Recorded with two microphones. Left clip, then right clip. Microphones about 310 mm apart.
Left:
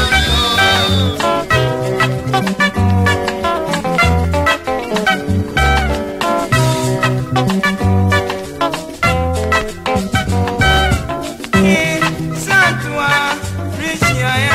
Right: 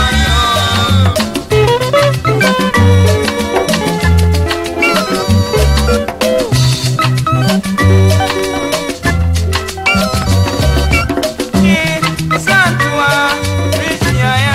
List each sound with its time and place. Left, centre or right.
11.6 s music: right